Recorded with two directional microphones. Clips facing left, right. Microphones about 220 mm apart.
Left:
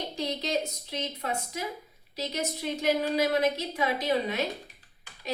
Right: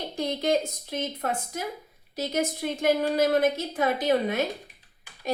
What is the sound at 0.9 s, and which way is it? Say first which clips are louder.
A woman's voice: right 3 dB; 50° right (ahead or behind).